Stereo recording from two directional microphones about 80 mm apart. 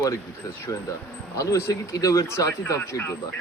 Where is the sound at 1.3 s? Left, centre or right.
Left.